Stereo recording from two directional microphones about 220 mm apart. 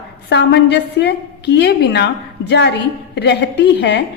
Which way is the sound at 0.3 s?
50° left (ahead or behind).